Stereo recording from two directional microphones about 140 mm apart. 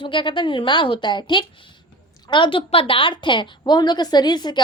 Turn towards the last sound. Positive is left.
turn(degrees=30)  # may be behind; listen again after turning